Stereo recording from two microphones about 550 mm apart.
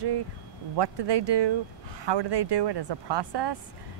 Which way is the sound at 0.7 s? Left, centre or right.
Right.